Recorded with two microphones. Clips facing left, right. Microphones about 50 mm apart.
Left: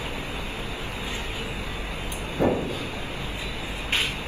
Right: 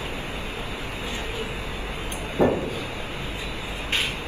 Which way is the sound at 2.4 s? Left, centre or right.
Right.